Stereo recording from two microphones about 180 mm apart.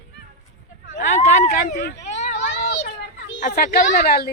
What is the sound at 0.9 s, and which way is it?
Speech, 40° left (ahead or behind).